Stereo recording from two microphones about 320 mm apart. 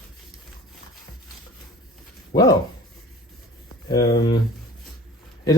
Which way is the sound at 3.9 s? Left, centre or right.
Centre.